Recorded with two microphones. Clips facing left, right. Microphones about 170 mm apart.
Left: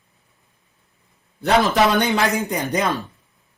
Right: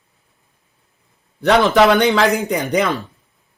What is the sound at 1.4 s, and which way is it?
A man's voice, 70° right (ahead or behind).